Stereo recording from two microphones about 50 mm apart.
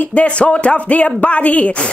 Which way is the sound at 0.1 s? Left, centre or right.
Left.